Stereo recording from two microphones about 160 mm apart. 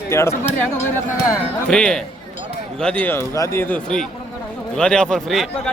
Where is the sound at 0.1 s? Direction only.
15° left (ahead or behind).